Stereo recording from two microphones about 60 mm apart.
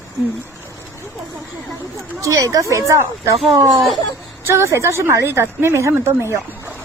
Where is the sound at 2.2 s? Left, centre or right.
Right.